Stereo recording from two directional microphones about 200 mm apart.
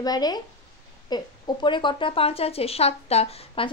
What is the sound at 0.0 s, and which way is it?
Speech, 20° left (ahead or behind).